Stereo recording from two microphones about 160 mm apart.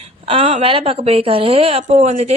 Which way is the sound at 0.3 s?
35° right (ahead or behind).